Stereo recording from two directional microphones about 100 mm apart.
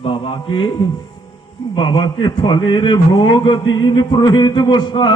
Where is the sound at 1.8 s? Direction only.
50° left (ahead or behind).